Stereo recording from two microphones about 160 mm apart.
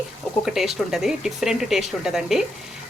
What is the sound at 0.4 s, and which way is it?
Speech, centre (ahead or behind).